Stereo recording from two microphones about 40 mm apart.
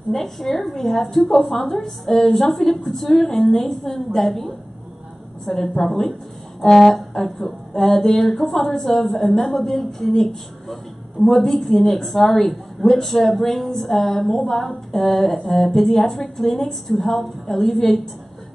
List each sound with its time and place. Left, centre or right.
0.1 s speech: centre